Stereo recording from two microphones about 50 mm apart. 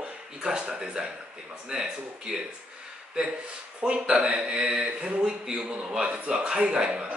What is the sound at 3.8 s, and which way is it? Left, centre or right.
Speech, centre.